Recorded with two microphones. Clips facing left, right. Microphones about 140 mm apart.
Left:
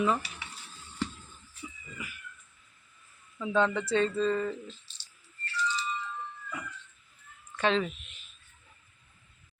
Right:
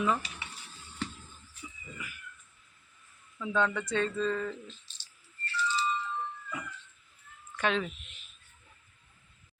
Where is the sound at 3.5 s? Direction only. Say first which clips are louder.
Left 3 dB; 25° left (ahead or behind).